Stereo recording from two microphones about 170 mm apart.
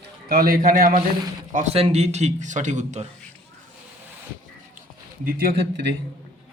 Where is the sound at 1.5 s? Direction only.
40° right (ahead or behind).